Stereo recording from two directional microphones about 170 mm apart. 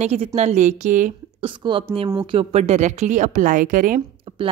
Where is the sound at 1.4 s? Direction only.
30° right (ahead or behind); by 4.0 s 50° right (ahead or behind).